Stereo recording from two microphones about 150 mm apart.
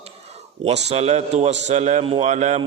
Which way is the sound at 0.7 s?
45° right (ahead or behind).